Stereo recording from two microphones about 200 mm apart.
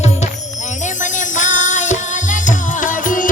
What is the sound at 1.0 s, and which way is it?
Music, 40° left (ahead or behind).